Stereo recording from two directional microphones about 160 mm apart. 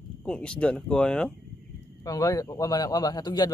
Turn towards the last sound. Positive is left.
turn(degrees=25)  # may be behind; listen again after turning